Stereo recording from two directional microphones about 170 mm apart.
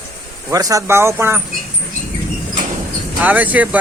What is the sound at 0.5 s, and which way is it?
Speech, 20° right (ahead or behind).